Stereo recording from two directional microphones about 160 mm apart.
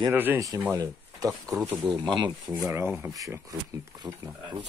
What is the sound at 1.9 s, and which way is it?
Speech, 30° right (ahead or behind).